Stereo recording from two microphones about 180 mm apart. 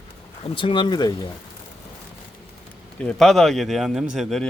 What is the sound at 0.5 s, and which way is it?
Speech, 25° left (ahead or behind).